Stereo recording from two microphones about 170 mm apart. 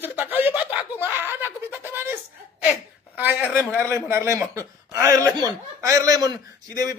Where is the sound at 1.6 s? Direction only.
15° right (ahead or behind).